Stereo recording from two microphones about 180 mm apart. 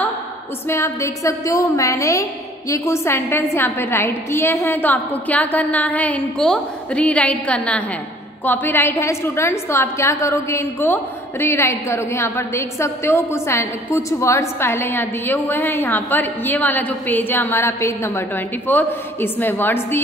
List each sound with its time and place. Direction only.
0.7 s a woman's voice: 15° left (ahead or behind)